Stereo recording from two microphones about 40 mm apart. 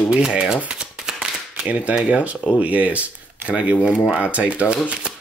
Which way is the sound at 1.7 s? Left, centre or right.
Right.